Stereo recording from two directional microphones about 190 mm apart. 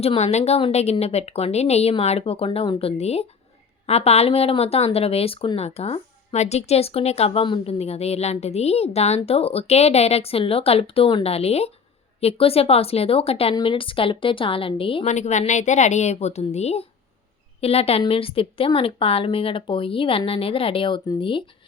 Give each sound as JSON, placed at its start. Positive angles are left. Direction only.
{"t": 0.0, "sound": "a woman's voice", "side_deg": 35}